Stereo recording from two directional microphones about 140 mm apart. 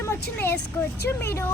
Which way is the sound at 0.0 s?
15° left (ahead or behind).